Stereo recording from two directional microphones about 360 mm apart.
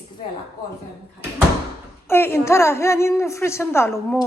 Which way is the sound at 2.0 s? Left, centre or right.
Centre.